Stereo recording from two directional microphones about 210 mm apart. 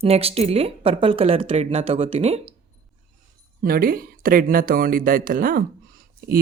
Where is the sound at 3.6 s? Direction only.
45° right (ahead or behind).